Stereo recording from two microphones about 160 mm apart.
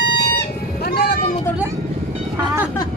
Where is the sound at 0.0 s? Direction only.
90° left.